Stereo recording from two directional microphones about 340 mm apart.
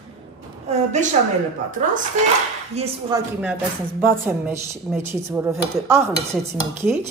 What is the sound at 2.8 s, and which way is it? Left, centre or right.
Speech, centre.